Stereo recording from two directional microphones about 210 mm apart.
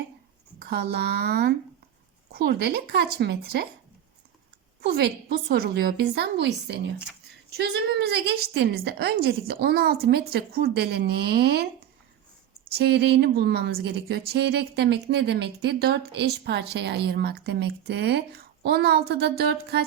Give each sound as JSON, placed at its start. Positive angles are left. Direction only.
{"t": 0.7, "sound": "speech", "side_deg": -50}
{"t": 5.3, "sound": "speech", "side_deg": -45}
{"t": 12.6, "sound": "speech", "side_deg": -50}